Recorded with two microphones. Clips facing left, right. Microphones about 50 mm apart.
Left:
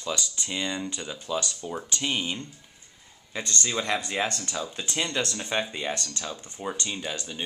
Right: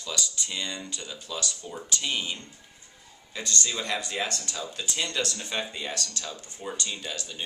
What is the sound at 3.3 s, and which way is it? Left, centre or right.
Speech, left.